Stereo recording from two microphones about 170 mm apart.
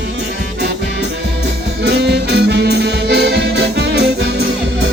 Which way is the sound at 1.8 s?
75° right (ahead or behind).